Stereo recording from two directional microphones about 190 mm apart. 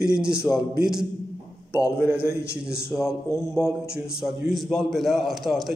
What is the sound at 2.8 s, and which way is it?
A man's voice, centre (ahead or behind).